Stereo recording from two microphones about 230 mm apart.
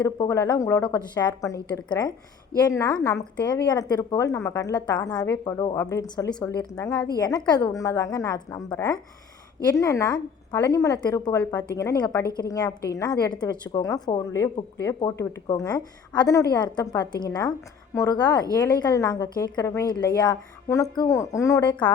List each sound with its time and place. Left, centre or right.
0.0 s a woman's voice: centre